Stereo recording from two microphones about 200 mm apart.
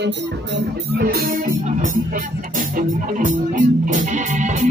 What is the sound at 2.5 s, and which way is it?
Music, 40° right (ahead or behind).